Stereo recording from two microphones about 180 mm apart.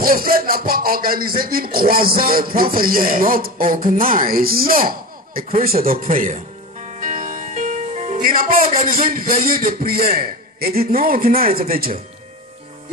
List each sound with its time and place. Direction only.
0.0 s speech: 55° right (ahead or behind)